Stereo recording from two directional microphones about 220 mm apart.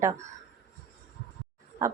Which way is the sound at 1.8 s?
15° right (ahead or behind).